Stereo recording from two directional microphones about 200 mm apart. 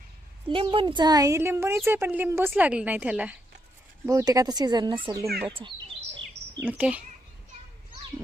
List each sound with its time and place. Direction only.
0.4 s speech: 25° right (ahead or behind); by 3.3 s 5° right (ahead or behind)
4.0 s speech: 20° right (ahead or behind)
6.6 s speech: 5° right (ahead or behind)